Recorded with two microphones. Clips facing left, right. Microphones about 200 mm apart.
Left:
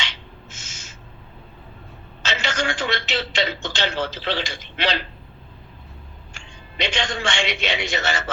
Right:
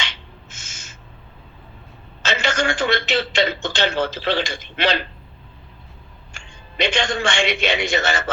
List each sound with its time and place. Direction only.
0.5 s owl: 50° right (ahead or behind)
2.2 s a man's voice: 50° right (ahead or behind)
6.3 s a man's voice: 50° right (ahead or behind)